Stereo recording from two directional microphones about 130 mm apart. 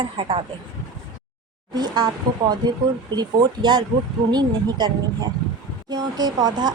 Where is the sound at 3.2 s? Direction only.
35° right (ahead or behind).